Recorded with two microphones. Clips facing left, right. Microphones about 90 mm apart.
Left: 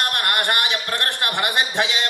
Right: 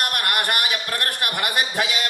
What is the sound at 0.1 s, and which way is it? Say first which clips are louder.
A man's voice: left 2 dB; 25° left (ahead or behind).